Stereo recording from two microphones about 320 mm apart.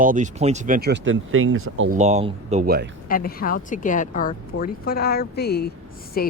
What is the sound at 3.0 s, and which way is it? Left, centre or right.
Speech, left.